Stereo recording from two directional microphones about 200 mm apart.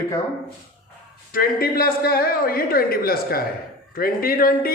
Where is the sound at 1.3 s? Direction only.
50° left (ahead or behind).